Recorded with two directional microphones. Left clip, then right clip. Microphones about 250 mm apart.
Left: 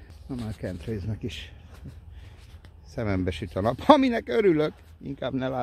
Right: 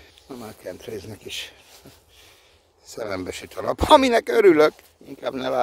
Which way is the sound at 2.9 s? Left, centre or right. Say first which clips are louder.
Right 1 dB; centre.